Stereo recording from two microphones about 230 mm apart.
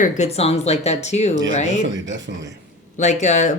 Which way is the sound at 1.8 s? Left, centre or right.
Right.